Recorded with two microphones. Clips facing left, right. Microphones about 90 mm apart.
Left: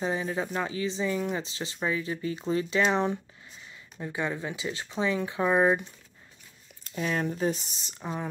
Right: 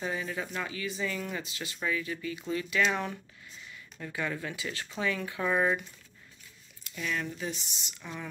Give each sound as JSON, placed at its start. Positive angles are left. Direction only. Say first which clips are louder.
{"t": 0.0, "sound": "speech", "louder": "left 5 dB", "side_deg": 30}
{"t": 6.8, "sound": "speech", "louder": "left 5 dB", "side_deg": 40}